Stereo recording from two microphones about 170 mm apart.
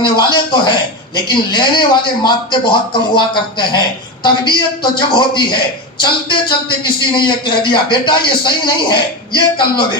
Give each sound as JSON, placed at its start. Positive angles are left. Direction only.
{"t": 0.0, "sound": "a man's voice", "side_deg": 25}